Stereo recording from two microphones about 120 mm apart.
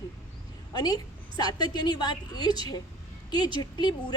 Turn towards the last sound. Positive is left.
turn(degrees=40)  # may be behind; listen again after turning